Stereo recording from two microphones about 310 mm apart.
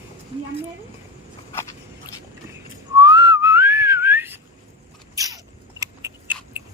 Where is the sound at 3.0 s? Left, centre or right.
Centre.